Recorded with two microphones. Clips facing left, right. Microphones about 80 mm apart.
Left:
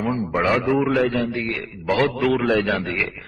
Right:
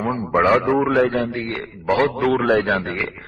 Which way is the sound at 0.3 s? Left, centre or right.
Right.